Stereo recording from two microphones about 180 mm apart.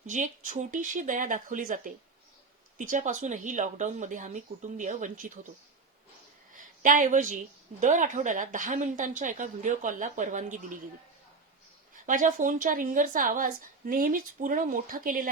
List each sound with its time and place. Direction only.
0.0 s a woman's voice: 45° right (ahead or behind)
6.8 s a woman's voice: 45° right (ahead or behind)
12.0 s a woman's voice: 45° right (ahead or behind)